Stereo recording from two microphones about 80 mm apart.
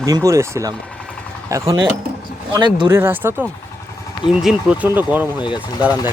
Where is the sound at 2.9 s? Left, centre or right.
Right.